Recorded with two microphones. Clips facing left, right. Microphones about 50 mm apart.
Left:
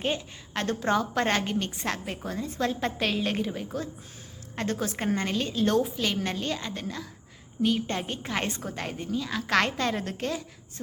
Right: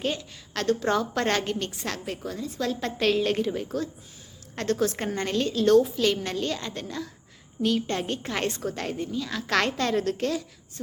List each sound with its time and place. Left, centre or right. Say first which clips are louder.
0.0 s a woman's voice: even; left
2.8 s a woman's voice: right 4 dB; centre
5.5 s a woman's voice: right 7 dB; centre
6.2 s a woman's voice: right 1 dB; centre